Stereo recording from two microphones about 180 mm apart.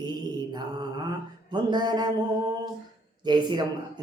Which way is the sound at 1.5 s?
25° right (ahead or behind).